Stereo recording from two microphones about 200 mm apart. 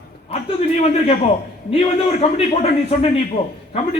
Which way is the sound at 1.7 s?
30° left (ahead or behind).